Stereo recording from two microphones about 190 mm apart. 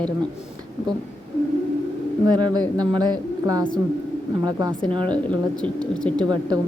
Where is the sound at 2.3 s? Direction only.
20° right (ahead or behind).